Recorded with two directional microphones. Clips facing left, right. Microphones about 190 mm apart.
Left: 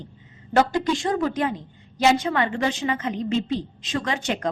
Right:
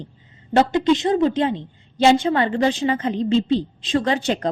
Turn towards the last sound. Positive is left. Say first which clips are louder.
# right 6 dB
turn(degrees=-30)  # may be behind; listen again after turning